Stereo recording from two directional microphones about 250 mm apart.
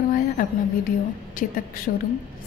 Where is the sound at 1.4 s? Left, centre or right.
Left.